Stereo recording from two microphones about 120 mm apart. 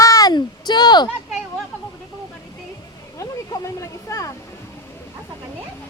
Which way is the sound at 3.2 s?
30° left (ahead or behind).